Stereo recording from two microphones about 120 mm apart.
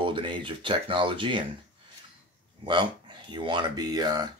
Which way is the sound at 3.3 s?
40° right (ahead or behind).